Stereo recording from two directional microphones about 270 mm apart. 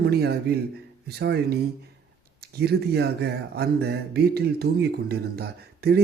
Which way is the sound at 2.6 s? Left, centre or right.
Right.